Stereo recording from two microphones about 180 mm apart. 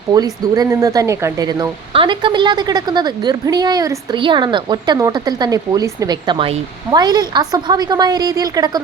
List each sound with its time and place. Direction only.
0.1 s a woman's voice: 20° right (ahead or behind)